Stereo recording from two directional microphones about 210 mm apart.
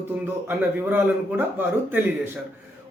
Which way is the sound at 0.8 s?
10° right (ahead or behind).